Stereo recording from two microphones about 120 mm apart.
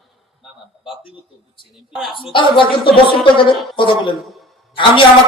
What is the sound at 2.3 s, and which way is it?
Speech, 45° left (ahead or behind).